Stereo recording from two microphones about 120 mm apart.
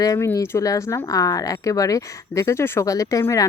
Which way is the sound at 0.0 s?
30° left (ahead or behind).